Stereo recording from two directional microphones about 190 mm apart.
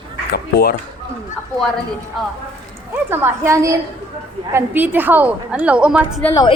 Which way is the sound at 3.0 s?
10° right (ahead or behind).